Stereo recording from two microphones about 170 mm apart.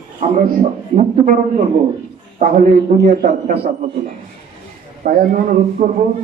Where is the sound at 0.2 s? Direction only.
45° right (ahead or behind).